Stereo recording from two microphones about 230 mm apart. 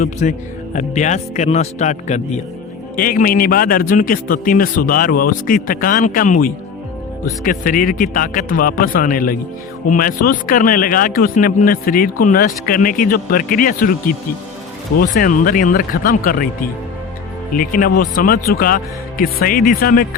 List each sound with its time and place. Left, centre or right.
0.0 s speech: left
17.5 s speech: left